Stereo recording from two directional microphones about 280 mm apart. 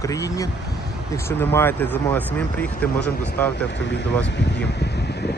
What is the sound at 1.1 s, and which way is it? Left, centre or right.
Speech, centre.